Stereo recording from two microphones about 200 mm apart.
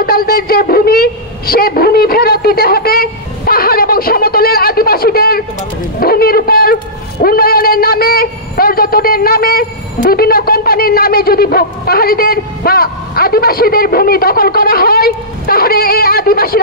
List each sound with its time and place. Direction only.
0.0 s a man's voice: 50° left (ahead or behind)